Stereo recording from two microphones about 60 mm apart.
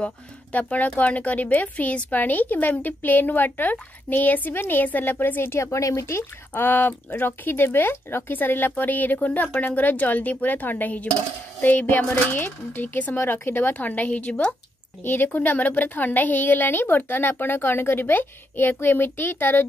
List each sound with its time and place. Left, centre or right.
0.0 s a woman's voice: left
15.0 s a woman's voice: left